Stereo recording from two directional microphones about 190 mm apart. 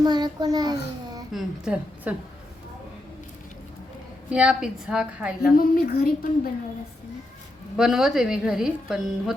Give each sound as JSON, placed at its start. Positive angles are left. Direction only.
{"t": 0.0, "sound": "a child's voice", "side_deg": -20}
{"t": 1.3, "sound": "a woman's voice", "side_deg": 0}
{"t": 4.3, "sound": "a woman's voice", "side_deg": -5}
{"t": 5.5, "sound": "a woman's voice", "side_deg": 50}
{"t": 7.8, "sound": "a woman's voice", "side_deg": 0}